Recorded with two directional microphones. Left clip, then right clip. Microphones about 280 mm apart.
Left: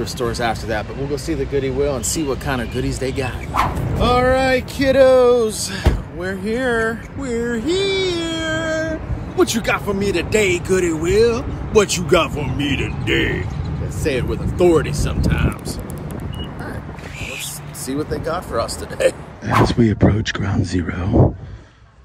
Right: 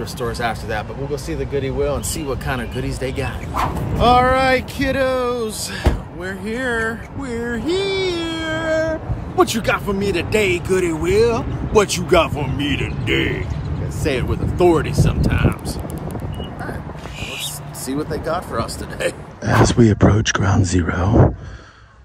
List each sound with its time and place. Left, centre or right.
0.0 s speech: centre
17.8 s speech: centre
19.8 s speech: left
20.2 s speech: right
20.4 s speech: left